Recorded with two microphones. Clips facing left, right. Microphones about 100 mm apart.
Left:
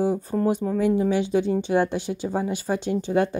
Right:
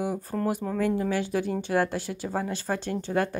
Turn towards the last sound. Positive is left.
turn(degrees=20)  # may be behind; listen again after turning